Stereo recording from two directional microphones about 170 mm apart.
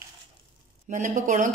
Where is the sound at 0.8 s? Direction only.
50° right (ahead or behind).